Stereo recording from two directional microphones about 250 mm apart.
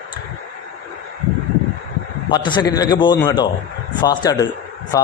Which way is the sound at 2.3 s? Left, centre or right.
Centre.